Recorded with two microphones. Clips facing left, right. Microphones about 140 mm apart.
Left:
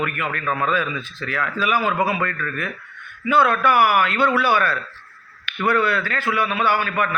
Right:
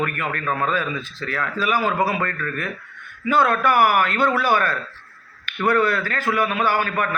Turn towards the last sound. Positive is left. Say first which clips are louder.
# even
turn(degrees=-40)  # may be behind; listen again after turning